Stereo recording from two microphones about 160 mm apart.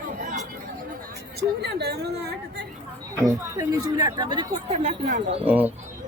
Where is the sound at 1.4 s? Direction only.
90° right.